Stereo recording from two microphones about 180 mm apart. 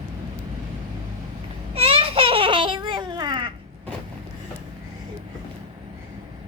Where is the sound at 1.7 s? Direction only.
35° right (ahead or behind).